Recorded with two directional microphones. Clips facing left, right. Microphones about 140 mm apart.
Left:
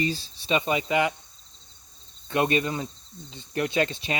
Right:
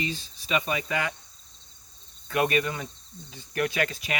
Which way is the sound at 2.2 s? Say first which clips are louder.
Left 1 dB; 25° left (ahead or behind).